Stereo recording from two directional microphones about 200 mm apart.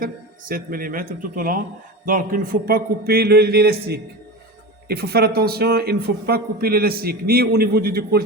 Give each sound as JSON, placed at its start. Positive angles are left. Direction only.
{"t": 0.0, "sound": "a man's voice", "side_deg": -45}